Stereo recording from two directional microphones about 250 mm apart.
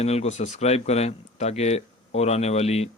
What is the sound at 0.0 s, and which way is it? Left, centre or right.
Speech, left.